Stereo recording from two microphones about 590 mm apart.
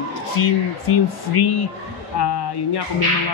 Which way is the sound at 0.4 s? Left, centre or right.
Left.